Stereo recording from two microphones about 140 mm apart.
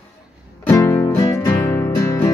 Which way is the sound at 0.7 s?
20° left (ahead or behind).